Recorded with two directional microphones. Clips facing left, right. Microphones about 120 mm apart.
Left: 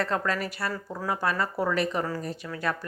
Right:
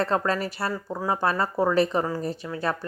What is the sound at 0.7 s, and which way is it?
Speech, 20° right (ahead or behind).